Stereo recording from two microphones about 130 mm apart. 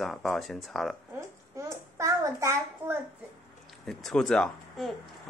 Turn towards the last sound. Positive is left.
turn(degrees=0)  # may be behind; listen again after turning